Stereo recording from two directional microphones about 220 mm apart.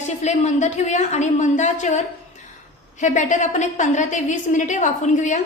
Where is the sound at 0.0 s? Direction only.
30° left (ahead or behind).